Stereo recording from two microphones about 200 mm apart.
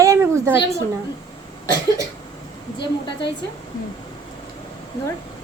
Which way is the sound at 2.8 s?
25° left (ahead or behind).